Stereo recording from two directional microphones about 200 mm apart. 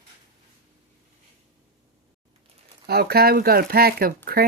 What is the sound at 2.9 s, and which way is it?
Speech, 50° right (ahead or behind).